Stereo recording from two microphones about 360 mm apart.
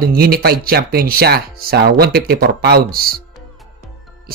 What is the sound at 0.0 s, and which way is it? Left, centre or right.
Speech, right.